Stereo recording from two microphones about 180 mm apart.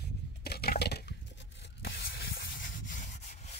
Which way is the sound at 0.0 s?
65° left (ahead or behind).